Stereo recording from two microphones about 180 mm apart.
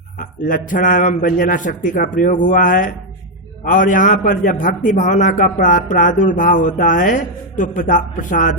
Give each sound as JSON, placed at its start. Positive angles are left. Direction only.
{"t": 0.2, "sound": "a man's voice", "side_deg": 45}